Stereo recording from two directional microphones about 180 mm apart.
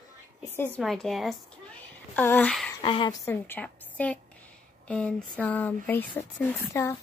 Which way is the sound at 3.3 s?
10° left (ahead or behind).